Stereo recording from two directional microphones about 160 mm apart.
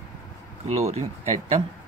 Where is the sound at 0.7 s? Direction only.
40° right (ahead or behind).